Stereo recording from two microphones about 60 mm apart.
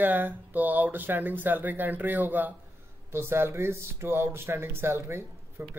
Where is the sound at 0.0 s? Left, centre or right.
Right.